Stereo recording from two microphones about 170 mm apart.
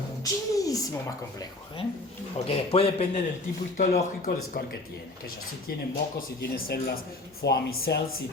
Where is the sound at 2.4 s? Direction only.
35° left (ahead or behind).